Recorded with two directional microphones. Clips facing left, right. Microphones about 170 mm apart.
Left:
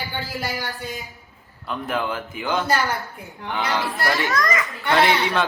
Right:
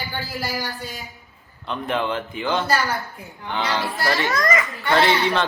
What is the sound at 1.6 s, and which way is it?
A man's voice, 5° left (ahead or behind).